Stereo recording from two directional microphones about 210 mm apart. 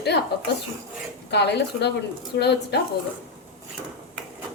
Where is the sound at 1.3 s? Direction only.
55° left (ahead or behind).